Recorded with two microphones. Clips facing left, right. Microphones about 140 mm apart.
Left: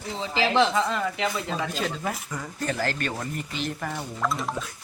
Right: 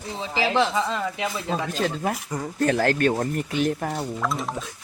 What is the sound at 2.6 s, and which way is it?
Speech, 60° right (ahead or behind).